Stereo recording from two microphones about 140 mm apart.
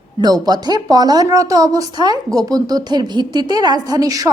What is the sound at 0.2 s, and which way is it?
Speech, 30° right (ahead or behind).